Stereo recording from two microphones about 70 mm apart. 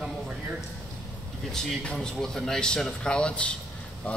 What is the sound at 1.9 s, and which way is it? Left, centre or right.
Speech, centre.